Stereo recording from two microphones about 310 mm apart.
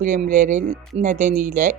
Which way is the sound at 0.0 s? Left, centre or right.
Right.